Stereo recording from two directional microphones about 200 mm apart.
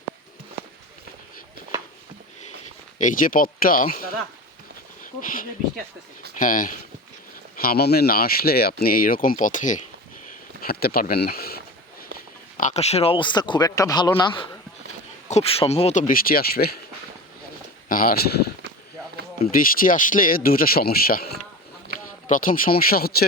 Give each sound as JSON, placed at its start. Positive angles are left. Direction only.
{"t": 3.0, "sound": "speech", "side_deg": 45}
{"t": 5.2, "sound": "speech", "side_deg": 45}
{"t": 10.6, "sound": "speech", "side_deg": 50}
{"t": 12.5, "sound": "speech", "side_deg": 35}
{"t": 15.3, "sound": "speech", "side_deg": 30}
{"t": 17.8, "sound": "speech", "side_deg": 45}
{"t": 19.5, "sound": "speech", "side_deg": 45}
{"t": 22.3, "sound": "speech", "side_deg": 40}